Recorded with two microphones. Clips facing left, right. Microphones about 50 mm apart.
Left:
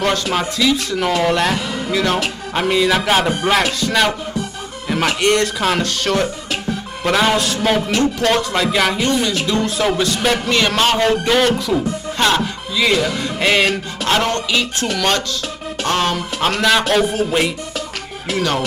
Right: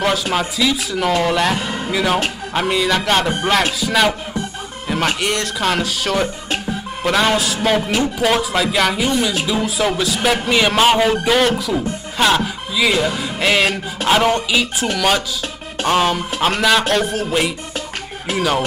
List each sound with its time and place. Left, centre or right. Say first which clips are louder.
0.0 s music: even; centre
13.2 s speech: left 1 dB; centre
13.7 s music: right 1 dB; centre